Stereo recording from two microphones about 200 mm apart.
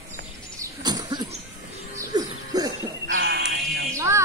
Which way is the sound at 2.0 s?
20° right (ahead or behind).